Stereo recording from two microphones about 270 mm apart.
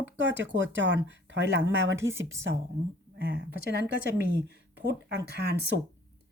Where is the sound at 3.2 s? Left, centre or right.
Right.